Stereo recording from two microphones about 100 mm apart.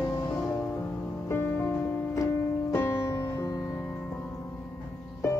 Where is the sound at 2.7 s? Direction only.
25° left (ahead or behind).